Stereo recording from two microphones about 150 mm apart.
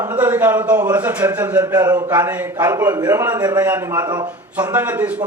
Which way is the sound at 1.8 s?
25° right (ahead or behind).